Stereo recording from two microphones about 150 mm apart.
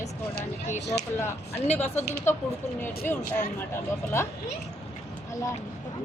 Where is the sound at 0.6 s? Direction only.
50° left (ahead or behind).